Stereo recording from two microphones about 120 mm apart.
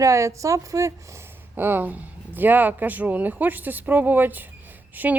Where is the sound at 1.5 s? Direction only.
15° right (ahead or behind).